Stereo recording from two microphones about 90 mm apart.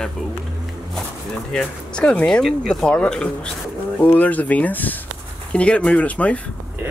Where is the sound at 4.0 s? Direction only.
20° left (ahead or behind).